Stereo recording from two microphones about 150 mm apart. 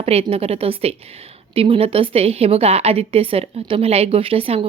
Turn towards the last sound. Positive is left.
turn(degrees=-40)  # may be behind; listen again after turning